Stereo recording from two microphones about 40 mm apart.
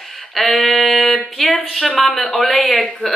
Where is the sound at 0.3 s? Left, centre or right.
Centre.